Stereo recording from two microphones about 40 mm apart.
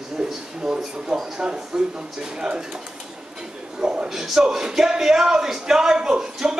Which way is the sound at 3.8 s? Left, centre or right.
Right.